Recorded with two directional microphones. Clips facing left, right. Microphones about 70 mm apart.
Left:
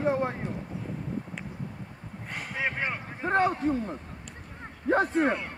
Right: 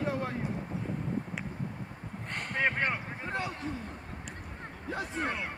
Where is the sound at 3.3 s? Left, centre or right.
Left.